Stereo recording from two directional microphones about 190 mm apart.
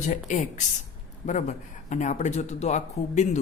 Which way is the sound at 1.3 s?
40° left (ahead or behind).